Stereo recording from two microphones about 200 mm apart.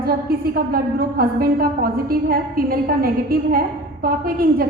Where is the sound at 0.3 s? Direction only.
50° right (ahead or behind).